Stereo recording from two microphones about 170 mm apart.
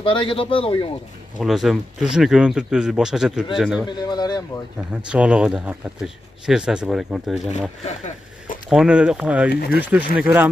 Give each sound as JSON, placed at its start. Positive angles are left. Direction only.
{"t": 0.0, "sound": "a man's voice", "side_deg": 30}
{"t": 1.4, "sound": "speech", "side_deg": 0}
{"t": 3.8, "sound": "a man's voice", "side_deg": 25}
{"t": 5.0, "sound": "speech", "side_deg": -5}
{"t": 7.8, "sound": "speech", "side_deg": 45}
{"t": 8.6, "sound": "speech", "side_deg": -5}
{"t": 9.5, "sound": "speech", "side_deg": 65}
{"t": 9.8, "sound": "speech", "side_deg": -10}